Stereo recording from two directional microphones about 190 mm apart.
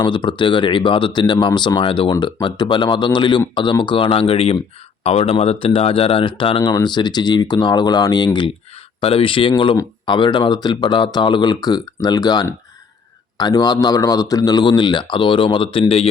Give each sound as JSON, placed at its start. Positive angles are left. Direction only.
{"t": 0.0, "sound": "speech", "side_deg": 25}